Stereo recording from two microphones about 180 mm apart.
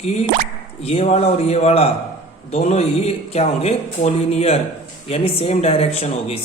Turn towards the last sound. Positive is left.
turn(degrees=35)  # may be behind; listen again after turning